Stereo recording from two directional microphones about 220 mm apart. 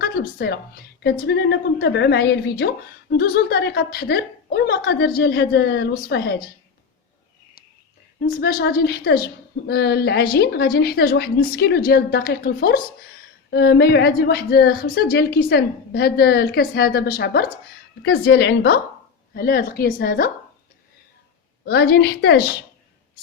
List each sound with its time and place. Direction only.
0.0 s a sound: 45° left (ahead or behind)
1.0 s a woman's voice: 45° left (ahead or behind)
8.2 s a woman's voice: 45° left (ahead or behind)
21.7 s a woman's voice: 45° left (ahead or behind)